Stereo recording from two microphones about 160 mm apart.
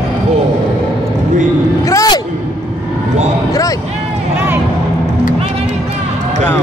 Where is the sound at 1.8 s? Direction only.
20° left (ahead or behind).